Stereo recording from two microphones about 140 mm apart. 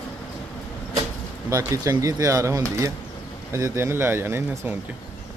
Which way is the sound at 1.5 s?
25° right (ahead or behind).